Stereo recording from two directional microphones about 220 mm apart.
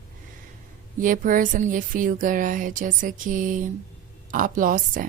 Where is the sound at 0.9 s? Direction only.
40° right (ahead or behind).